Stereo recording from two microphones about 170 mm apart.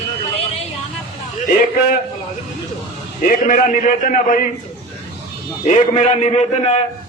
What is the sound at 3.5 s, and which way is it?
Speech, 50° left (ahead or behind).